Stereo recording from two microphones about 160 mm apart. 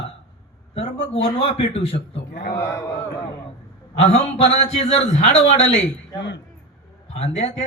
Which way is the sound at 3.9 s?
40° left (ahead or behind).